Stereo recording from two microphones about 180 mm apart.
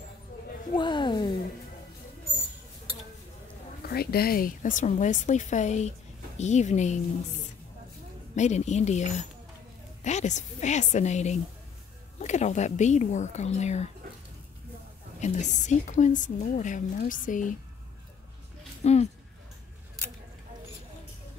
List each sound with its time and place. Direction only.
0.7 s a sound: 25° left (ahead or behind)
3.8 s a woman's voice: 60° left (ahead or behind); by 13.8 s 40° left (ahead or behind)
15.1 s a woman's voice: 40° left (ahead or behind)
18.8 s a woman's voice: 40° left (ahead or behind)